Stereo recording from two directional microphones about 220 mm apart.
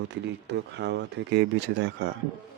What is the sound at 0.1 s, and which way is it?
Speech, 50° right (ahead or behind).